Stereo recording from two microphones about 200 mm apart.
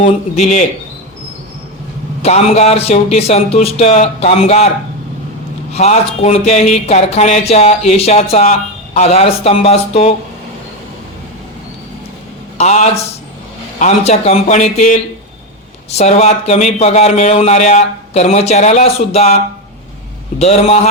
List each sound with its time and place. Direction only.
0.0 s speech: 35° left (ahead or behind)
2.2 s speech: 35° left (ahead or behind)
5.7 s speech: 30° left (ahead or behind)
12.5 s speech: 35° left (ahead or behind)
20.4 s speech: 30° left (ahead or behind)